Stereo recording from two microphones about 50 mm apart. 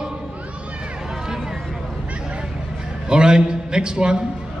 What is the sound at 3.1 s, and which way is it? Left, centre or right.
A man's voice, centre.